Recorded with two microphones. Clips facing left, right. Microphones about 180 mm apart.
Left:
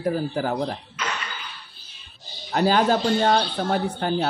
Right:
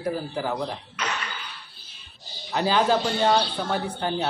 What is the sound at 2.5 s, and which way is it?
Speech, 45° left (ahead or behind).